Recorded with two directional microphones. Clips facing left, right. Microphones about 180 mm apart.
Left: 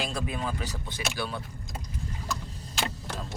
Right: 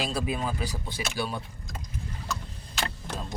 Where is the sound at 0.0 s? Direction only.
5° right (ahead or behind).